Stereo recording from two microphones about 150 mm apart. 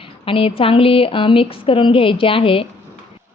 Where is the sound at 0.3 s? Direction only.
40° left (ahead or behind).